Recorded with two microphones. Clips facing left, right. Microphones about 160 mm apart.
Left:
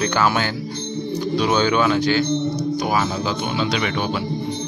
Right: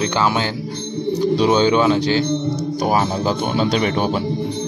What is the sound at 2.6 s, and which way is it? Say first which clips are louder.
Speech: right 2 dB; 45° right (ahead or behind).